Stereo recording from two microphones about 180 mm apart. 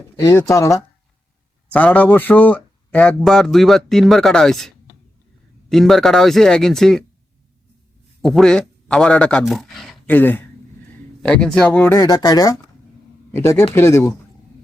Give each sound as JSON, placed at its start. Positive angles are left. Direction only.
{"t": 0.2, "sound": "speech", "side_deg": 15}
{"t": 8.2, "sound": "speech", "side_deg": 0}